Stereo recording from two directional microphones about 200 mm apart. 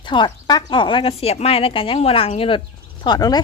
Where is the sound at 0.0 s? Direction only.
25° left (ahead or behind).